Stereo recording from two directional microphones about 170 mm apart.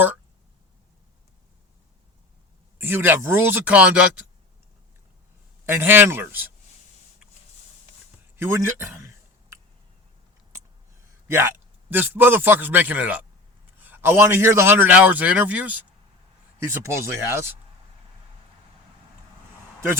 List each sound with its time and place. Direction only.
2.7 s speech: 10° right (ahead or behind)
5.6 s speech: 15° right (ahead or behind)
8.4 s a sound: 15° right (ahead or behind)
11.3 s speech: 15° right (ahead or behind)